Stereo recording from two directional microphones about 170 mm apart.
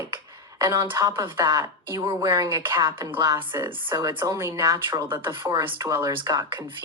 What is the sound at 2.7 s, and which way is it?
Speech, 30° right (ahead or behind).